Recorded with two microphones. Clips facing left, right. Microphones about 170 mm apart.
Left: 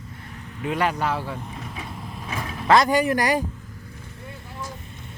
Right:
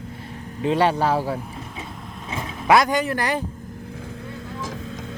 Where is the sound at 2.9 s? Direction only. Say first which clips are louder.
Left 2 dB; 10° left (ahead or behind).